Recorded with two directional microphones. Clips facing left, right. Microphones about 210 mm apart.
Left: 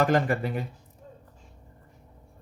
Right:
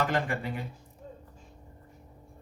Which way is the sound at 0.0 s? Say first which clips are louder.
Left 6 dB; 45° left (ahead or behind).